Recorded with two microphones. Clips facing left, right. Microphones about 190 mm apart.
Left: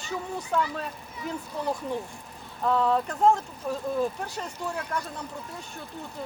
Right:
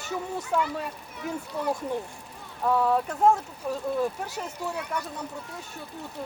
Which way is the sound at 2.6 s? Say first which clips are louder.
Even; 10° right (ahead or behind).